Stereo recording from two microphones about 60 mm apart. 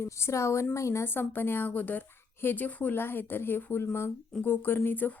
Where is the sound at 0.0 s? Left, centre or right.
Left.